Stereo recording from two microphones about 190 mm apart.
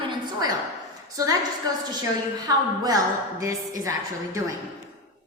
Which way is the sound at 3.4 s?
20° right (ahead or behind).